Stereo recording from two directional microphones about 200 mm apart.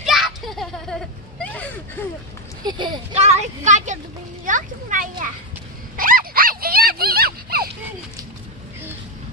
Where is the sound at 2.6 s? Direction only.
20° right (ahead or behind); by 7.7 s 50° right (ahead or behind).